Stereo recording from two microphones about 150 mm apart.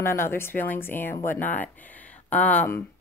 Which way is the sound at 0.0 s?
15° left (ahead or behind).